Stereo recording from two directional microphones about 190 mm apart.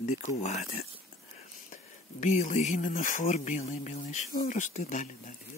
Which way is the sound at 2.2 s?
40° left (ahead or behind).